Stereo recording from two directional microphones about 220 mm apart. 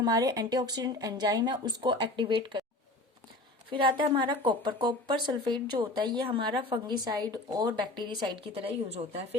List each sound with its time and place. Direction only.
0.0 s speech: 15° right (ahead or behind)
3.7 s speech: 20° right (ahead or behind)